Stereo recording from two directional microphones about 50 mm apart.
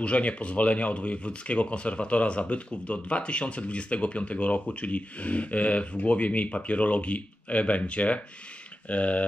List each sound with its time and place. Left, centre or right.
0.0 s speech: left